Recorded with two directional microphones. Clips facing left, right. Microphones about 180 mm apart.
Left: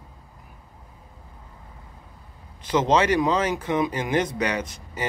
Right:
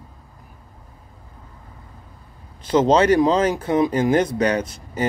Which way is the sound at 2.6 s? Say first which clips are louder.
Right 5 dB; 35° right (ahead or behind).